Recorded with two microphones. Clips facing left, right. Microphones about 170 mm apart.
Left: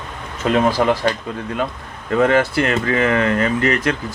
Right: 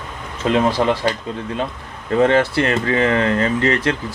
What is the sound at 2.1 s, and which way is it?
Speech, 30° right (ahead or behind).